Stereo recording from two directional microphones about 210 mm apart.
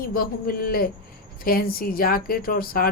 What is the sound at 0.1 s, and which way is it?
Speech, 45° left (ahead or behind).